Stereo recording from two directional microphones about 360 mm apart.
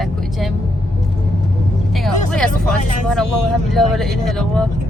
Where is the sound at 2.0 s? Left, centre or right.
Centre.